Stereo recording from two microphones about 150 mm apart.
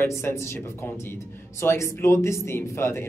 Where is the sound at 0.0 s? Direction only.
15° left (ahead or behind).